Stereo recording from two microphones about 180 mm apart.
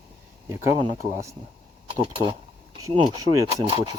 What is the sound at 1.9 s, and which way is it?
Speech, 30° right (ahead or behind).